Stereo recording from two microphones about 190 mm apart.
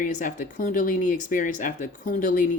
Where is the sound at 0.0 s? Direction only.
40° left (ahead or behind).